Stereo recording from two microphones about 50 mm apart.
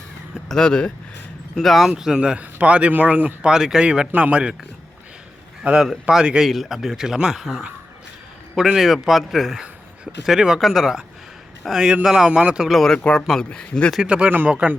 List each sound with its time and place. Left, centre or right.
0.4 s speech: centre
1.5 s speech: centre
2.0 s speech: centre; by 3.3 s right
3.4 s speech: centre
4.1 s speech: right
5.6 s speech: right
6.5 s speech: centre
9.6 s speech: centre
12.6 s speech: centre
13.4 s speech: left
14.0 s speech: right
14.3 s speech: right